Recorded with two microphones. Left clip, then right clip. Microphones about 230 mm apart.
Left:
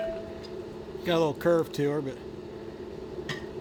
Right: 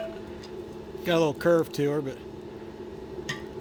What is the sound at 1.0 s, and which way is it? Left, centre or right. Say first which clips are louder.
A man's voice: right 2 dB; right.